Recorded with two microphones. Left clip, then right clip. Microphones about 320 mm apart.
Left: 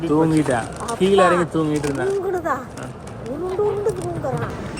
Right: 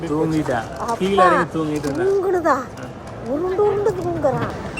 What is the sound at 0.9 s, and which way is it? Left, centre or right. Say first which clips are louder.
Speech: even; right.